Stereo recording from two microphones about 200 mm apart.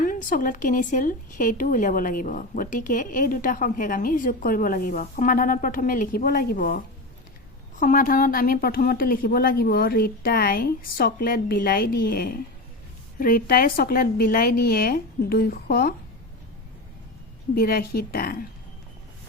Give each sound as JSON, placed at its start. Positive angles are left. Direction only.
{"t": 0.0, "sound": "speech", "side_deg": 40}
{"t": 17.5, "sound": "speech", "side_deg": 50}